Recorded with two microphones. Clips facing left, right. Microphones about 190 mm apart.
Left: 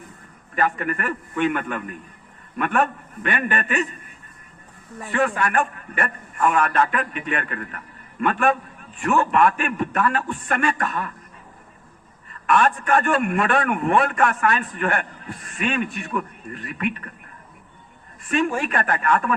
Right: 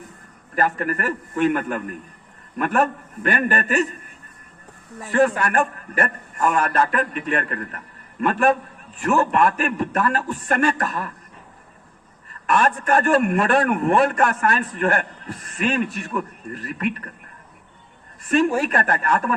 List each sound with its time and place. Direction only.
0.5 s a man's voice: 40° right (ahead or behind)
5.1 s a man's voice: 40° right (ahead or behind)
12.3 s a man's voice: 40° right (ahead or behind)
18.3 s a man's voice: 40° right (ahead or behind)